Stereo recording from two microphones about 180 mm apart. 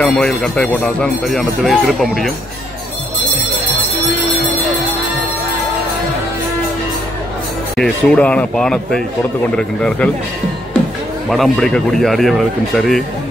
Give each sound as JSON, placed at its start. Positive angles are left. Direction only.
{"t": 0.0, "sound": "speech", "side_deg": 5}
{"t": 7.7, "sound": "speech", "side_deg": 5}
{"t": 11.2, "sound": "speech", "side_deg": 0}